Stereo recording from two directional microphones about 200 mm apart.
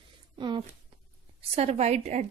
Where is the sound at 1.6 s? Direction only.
35° right (ahead or behind).